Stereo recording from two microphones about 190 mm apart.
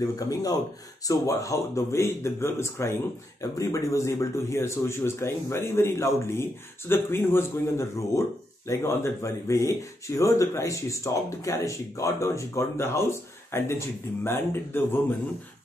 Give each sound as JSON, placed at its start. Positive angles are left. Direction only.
{"t": 0.0, "sound": "speech", "side_deg": 20}